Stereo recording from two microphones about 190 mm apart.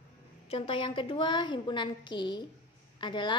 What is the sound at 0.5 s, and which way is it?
A woman's voice, 30° left (ahead or behind).